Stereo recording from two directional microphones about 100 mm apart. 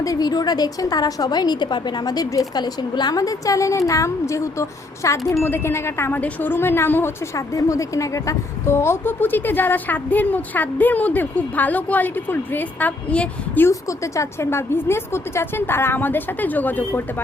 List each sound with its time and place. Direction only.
0.0 s a woman's voice: 35° left (ahead or behind)
7.3 s a woman's voice: 35° left (ahead or behind); by 13.7 s 15° left (ahead or behind)
13.7 s a woman's voice: 30° left (ahead or behind)